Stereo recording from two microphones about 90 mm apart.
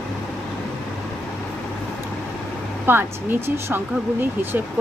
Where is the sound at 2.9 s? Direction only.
25° right (ahead or behind).